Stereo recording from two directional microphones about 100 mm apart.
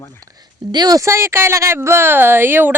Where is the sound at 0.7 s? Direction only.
40° right (ahead or behind).